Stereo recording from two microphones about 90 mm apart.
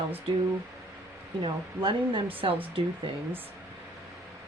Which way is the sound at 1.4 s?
65° right (ahead or behind).